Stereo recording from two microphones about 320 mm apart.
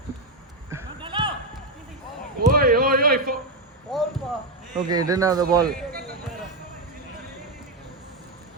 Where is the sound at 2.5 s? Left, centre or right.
Right.